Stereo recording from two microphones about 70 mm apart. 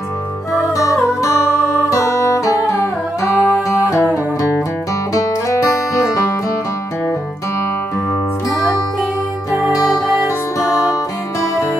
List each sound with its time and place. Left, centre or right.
0.6 s music: left
9.8 s music: left